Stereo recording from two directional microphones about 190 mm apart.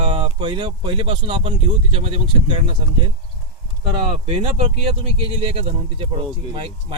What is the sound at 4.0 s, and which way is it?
Speech, 30° right (ahead or behind).